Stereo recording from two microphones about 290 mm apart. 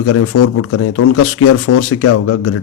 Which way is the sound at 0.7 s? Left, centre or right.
Left.